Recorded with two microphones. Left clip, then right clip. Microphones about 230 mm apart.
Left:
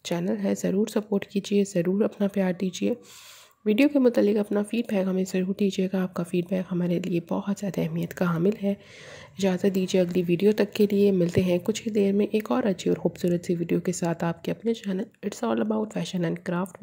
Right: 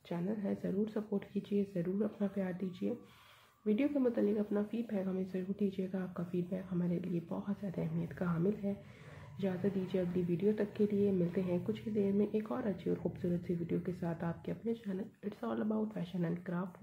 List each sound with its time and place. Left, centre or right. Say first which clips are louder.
0.0 s a woman's voice: left 12 dB; left